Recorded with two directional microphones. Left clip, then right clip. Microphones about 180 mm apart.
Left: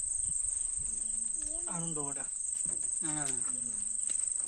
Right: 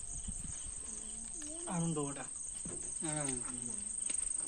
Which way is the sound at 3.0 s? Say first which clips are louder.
Right 1 dB; 70° left (ahead or behind).